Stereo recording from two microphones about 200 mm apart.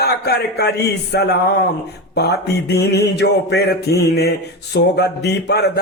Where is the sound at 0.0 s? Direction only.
55° left (ahead or behind).